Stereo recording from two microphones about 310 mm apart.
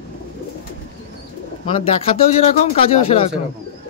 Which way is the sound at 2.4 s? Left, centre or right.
Centre.